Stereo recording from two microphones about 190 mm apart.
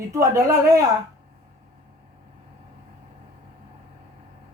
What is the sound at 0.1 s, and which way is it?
Speech, 15° right (ahead or behind).